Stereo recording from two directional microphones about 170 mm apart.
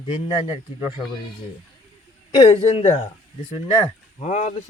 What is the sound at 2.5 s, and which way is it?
Speech, 35° left (ahead or behind).